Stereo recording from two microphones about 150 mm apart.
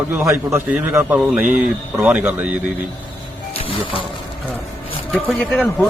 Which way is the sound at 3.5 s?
35° left (ahead or behind).